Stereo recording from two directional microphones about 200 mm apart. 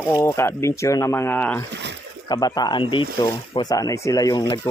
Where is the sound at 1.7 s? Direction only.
60° right (ahead or behind).